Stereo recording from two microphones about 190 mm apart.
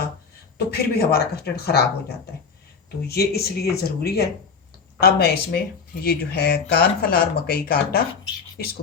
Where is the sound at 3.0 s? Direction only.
55° left (ahead or behind).